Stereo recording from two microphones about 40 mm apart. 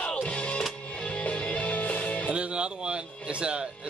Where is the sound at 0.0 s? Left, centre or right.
Left.